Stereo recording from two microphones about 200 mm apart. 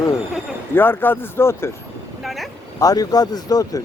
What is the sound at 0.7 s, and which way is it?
Speech, 10° left (ahead or behind).